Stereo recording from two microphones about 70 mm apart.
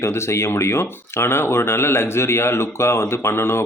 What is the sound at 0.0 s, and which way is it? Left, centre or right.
Speech, left.